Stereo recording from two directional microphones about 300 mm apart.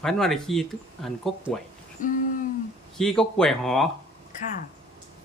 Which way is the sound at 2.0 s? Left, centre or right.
Left.